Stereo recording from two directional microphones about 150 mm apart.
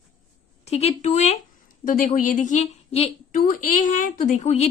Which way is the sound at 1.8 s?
60° left (ahead or behind).